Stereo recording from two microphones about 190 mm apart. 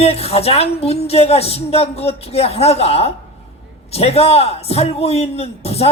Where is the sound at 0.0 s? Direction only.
35° left (ahead or behind).